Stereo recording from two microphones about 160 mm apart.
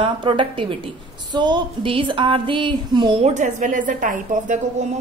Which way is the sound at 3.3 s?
50° right (ahead or behind).